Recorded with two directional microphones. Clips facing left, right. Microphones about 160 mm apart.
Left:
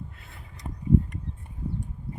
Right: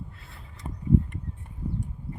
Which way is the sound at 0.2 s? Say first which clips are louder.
Even; 20° left (ahead or behind).